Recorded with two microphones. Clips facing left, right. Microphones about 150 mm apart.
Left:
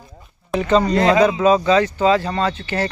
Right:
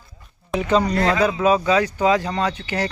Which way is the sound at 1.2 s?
10° right (ahead or behind).